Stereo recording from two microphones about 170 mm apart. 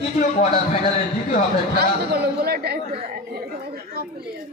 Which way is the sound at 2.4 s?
70° right (ahead or behind).